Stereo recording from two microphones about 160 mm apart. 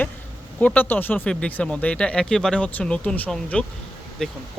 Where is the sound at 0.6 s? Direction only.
10° left (ahead or behind).